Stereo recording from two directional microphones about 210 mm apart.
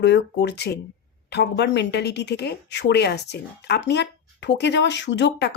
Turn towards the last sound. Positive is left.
turn(degrees=55)  # may be behind; listen again after turning